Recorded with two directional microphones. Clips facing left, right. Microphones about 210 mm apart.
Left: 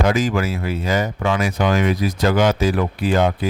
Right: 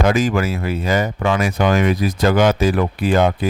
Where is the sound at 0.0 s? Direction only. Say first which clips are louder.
Right 2 dB; 55° right (ahead or behind).